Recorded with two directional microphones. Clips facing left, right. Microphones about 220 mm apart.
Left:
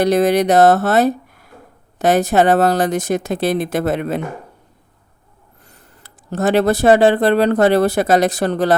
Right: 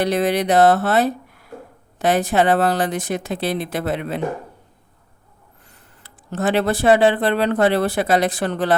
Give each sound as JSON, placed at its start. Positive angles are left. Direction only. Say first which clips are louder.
{"t": 0.0, "sound": "speech", "louder": "left 5 dB", "side_deg": 45}
{"t": 5.7, "sound": "speech", "louder": "left 2 dB", "side_deg": 40}